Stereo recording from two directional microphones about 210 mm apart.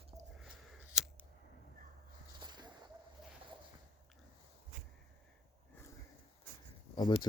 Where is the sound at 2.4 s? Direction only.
20° right (ahead or behind).